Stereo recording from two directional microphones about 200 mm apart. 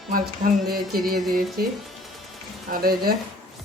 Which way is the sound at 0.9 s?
50° right (ahead or behind).